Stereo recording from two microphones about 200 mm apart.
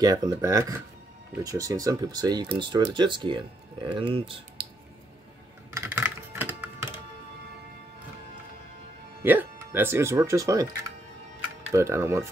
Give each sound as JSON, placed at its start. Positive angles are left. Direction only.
{"t": 0.0, "sound": "speech", "side_deg": -20}
{"t": 5.7, "sound": "computer keyboard", "side_deg": -15}
{"t": 9.2, "sound": "speech", "side_deg": -10}
{"t": 11.7, "sound": "speech", "side_deg": -15}